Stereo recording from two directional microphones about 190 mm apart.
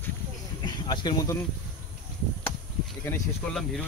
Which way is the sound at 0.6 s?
20° left (ahead or behind).